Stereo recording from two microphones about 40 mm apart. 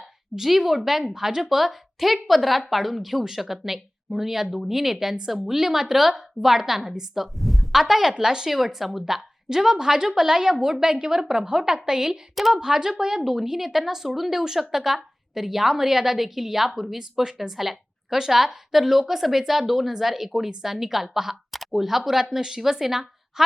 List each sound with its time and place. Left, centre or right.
0.3 s a woman's voice: centre